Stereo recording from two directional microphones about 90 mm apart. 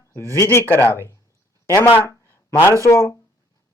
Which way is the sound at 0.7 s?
25° left (ahead or behind).